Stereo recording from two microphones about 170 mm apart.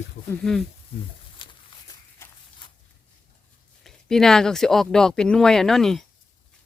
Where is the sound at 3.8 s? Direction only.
Centre (ahead or behind).